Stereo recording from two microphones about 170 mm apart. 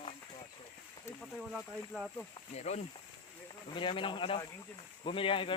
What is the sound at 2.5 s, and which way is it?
Speech, 40° left (ahead or behind).